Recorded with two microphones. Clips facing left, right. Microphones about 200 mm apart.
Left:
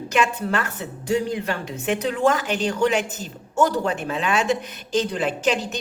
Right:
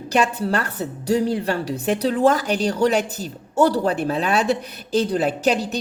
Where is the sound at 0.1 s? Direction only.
35° right (ahead or behind).